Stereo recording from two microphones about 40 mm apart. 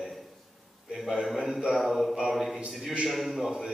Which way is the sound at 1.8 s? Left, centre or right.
Centre.